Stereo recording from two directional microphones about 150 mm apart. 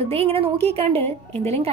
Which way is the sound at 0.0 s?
45° right (ahead or behind).